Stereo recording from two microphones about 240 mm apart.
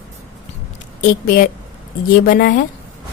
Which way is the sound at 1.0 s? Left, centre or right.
Left.